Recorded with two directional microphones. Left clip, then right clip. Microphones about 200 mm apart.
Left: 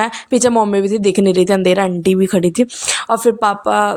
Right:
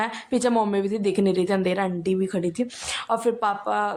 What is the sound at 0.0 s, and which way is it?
A woman's voice, 35° left (ahead or behind).